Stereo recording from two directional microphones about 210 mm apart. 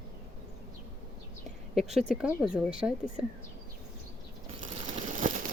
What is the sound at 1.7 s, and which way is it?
Speech, centre (ahead or behind).